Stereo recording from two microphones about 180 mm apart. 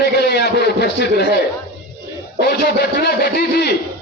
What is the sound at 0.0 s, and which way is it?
A man's voice, 65° left (ahead or behind).